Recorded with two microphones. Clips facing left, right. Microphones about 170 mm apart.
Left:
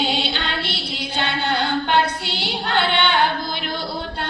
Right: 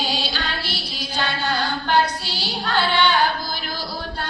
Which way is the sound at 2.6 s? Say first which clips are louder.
Even; 20° left (ahead or behind).